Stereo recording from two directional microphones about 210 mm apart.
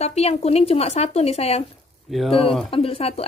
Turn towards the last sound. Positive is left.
turn(degrees=30)  # may be behind; listen again after turning